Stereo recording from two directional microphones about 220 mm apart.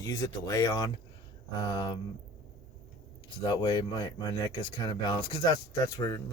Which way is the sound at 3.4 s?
20° left (ahead or behind).